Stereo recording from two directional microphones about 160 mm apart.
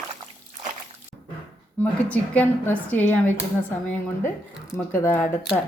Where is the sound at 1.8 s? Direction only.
10° left (ahead or behind).